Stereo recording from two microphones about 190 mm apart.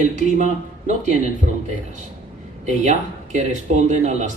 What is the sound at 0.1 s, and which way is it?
A man's voice, 40° right (ahead or behind).